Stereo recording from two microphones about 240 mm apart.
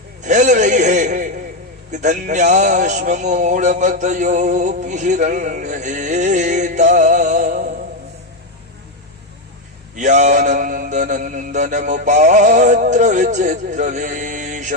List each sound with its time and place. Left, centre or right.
0.3 s a man's voice: right
9.9 s a man's voice: right